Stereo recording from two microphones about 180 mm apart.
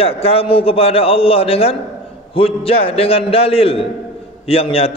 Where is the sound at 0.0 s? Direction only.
35° left (ahead or behind).